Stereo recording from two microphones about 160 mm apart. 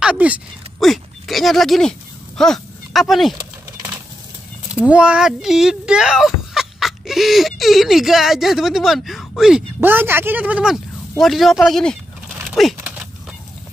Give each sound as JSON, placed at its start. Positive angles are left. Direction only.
{"t": 0.0, "sound": "speech", "side_deg": -10}
{"t": 3.3, "sound": "vehicle", "side_deg": -20}
{"t": 4.7, "sound": "speech", "side_deg": -5}
{"t": 12.4, "sound": "typing", "side_deg": 0}